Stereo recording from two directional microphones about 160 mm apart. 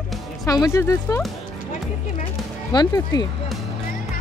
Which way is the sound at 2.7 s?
25° left (ahead or behind).